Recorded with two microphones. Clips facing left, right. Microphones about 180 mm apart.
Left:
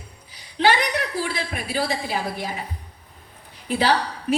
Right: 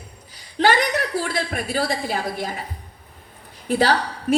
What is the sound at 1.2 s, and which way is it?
A woman's voice, 50° right (ahead or behind).